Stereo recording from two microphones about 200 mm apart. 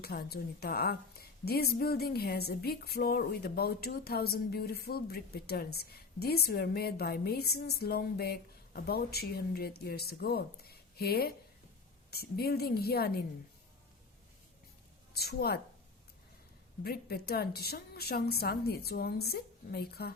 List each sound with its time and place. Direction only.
0.0 s a woman's voice: 50° left (ahead or behind)
15.1 s a woman's voice: 50° left (ahead or behind)
16.8 s a woman's voice: 50° left (ahead or behind)